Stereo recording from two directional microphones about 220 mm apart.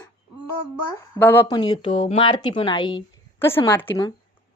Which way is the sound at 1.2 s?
10° left (ahead or behind).